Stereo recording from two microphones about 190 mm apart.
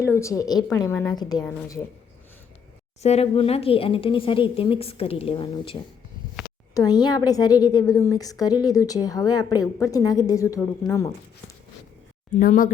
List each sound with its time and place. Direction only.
0.2 s a woman's voice: 15° left (ahead or behind)
3.0 s a woman's voice: 35° left (ahead or behind)
6.7 s a woman's voice: 20° left (ahead or behind)
12.4 s speech: 45° left (ahead or behind)